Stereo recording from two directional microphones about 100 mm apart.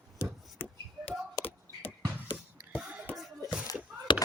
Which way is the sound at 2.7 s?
15° right (ahead or behind).